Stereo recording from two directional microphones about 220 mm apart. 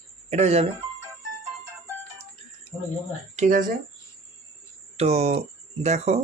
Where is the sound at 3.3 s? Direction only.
35° right (ahead or behind).